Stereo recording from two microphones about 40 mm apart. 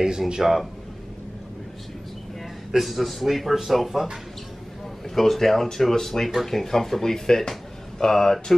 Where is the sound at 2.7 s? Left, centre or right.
Centre.